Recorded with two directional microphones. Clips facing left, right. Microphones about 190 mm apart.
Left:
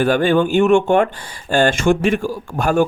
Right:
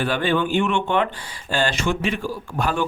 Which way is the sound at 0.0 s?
45° left (ahead or behind).